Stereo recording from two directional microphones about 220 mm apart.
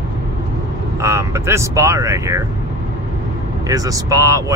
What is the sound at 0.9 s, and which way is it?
Speech, 10° right (ahead or behind).